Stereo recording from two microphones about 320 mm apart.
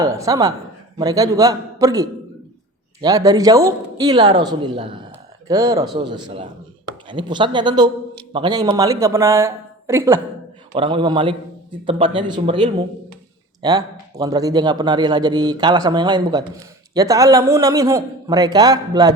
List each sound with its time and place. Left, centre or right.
0.0 s a man's voice: centre